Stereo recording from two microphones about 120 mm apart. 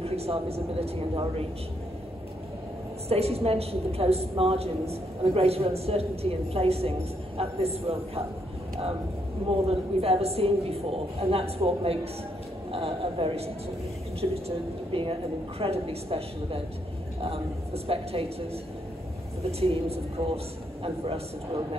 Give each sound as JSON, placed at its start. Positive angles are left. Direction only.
{"t": 0.0, "sound": "a woman's voice", "side_deg": -55}
{"t": 3.1, "sound": "a woman's voice", "side_deg": -55}
{"t": 9.5, "sound": "a woman's voice", "side_deg": -55}
{"t": 19.6, "sound": "a woman's voice", "side_deg": -55}